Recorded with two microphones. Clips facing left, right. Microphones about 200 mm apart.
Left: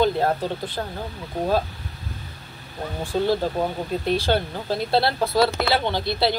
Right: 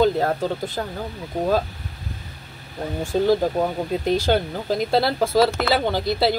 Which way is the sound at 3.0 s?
50° right (ahead or behind).